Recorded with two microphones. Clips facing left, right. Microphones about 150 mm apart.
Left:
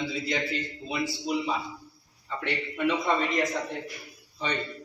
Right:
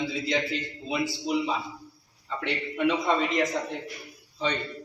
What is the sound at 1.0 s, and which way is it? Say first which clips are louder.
Speech: even; centre (ahead or behind).